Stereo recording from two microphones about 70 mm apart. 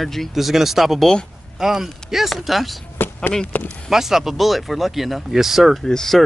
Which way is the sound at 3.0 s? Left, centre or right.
Left.